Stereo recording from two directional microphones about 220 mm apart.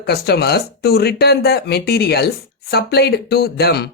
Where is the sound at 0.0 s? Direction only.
45° left (ahead or behind).